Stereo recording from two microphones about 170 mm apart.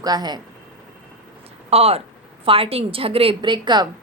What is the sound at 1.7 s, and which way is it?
A woman's voice, 35° right (ahead or behind).